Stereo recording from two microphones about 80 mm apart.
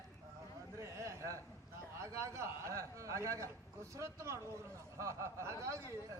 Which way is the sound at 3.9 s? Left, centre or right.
Right.